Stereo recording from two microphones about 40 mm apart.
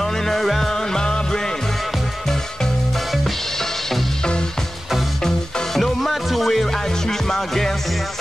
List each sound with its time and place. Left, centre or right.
0.0 s music: centre
4.2 s music: centre
5.8 s music: centre